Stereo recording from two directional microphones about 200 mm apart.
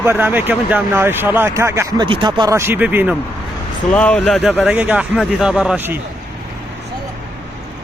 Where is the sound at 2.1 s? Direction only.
25° right (ahead or behind); by 3.2 s 5° right (ahead or behind).